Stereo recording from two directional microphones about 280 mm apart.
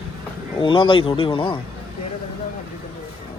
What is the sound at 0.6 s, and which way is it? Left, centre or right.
Speech, centre.